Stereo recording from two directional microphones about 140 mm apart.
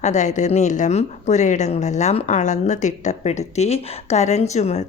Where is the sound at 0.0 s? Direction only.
55° left (ahead or behind).